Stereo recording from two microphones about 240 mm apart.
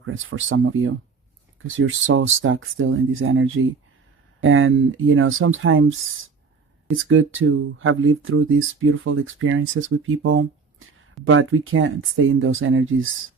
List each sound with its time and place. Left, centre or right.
0.0 s speech: right
6.9 s speech: right